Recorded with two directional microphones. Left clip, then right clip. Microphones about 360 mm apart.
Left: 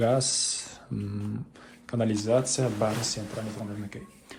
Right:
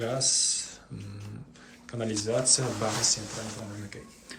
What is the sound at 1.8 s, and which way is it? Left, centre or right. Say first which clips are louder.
Speech: left 4 dB; centre.